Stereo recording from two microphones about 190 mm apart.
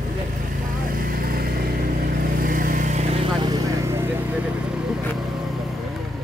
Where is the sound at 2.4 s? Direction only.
45° right (ahead or behind).